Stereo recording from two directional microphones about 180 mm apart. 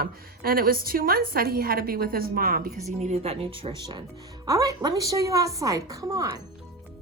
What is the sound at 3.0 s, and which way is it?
A woman's voice, 35° right (ahead or behind).